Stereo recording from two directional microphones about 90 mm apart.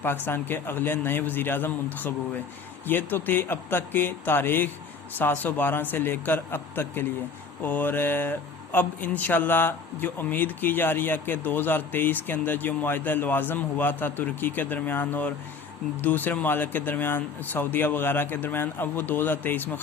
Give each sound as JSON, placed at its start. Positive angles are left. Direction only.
{"t": 0.0, "sound": "speech", "side_deg": 25}